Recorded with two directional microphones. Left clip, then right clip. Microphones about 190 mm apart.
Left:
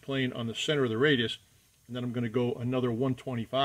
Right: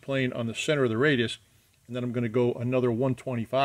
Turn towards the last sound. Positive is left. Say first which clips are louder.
# right 4 dB
turn(degrees=-40)  # may be behind; listen again after turning